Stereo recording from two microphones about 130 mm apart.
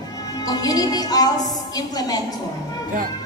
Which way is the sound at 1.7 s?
30° left (ahead or behind).